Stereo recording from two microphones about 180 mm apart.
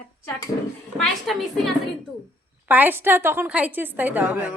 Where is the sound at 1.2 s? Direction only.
Centre (ahead or behind).